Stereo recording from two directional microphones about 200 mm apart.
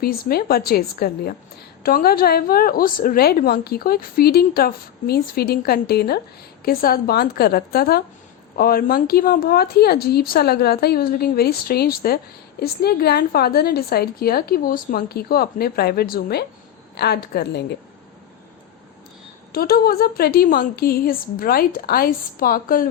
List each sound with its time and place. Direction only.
0.0 s a woman's voice: 50° left (ahead or behind)
19.5 s a woman's voice: 50° left (ahead or behind)